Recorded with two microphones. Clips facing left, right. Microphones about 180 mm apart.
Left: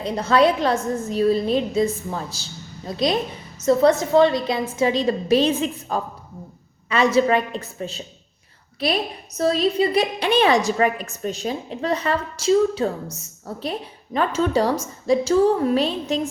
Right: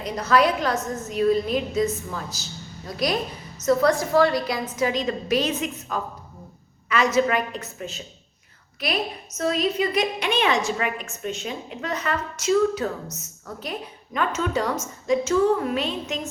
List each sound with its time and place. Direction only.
0.0 s a woman's voice: 25° left (ahead or behind)